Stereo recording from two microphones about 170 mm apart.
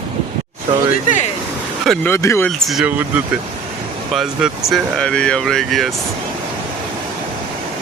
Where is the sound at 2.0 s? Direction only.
15° left (ahead or behind).